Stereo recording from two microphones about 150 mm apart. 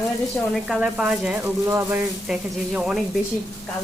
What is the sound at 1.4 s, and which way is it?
Speech, 20° right (ahead or behind).